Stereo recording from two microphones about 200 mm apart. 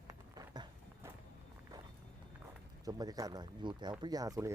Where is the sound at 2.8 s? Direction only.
20° right (ahead or behind).